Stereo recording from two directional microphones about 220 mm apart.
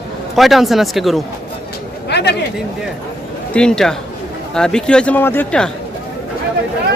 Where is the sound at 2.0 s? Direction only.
50° left (ahead or behind).